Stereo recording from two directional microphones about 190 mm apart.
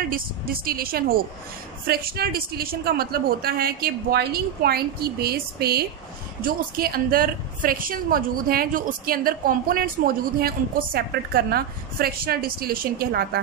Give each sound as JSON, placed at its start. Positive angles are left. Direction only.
{"t": 0.1, "sound": "a woman's voice", "side_deg": -50}